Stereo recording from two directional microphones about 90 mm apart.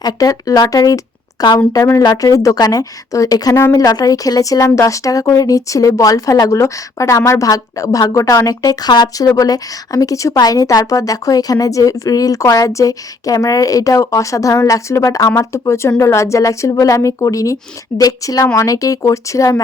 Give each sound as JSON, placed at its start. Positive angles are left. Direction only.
{"t": 0.0, "sound": "a woman's voice", "side_deg": 45}
{"t": 0.7, "sound": "a sound", "side_deg": 40}
{"t": 1.5, "sound": "a woman's voice", "side_deg": 40}